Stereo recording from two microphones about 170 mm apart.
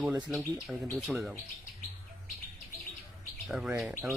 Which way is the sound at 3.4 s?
5° right (ahead or behind).